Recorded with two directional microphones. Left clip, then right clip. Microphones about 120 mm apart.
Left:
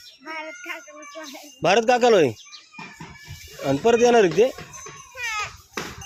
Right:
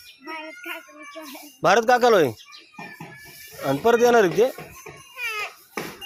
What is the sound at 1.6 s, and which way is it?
Speech, 45° left (ahead or behind).